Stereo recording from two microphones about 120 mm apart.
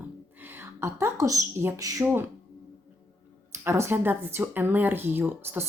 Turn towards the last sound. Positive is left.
turn(degrees=-20)  # may be behind; listen again after turning